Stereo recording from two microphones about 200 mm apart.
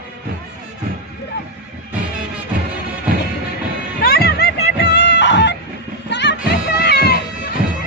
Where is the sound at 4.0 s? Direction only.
50° left (ahead or behind).